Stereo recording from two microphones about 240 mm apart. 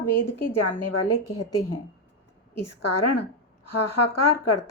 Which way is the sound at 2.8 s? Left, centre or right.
Left.